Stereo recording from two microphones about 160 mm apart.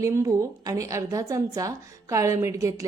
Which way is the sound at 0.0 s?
20° right (ahead or behind).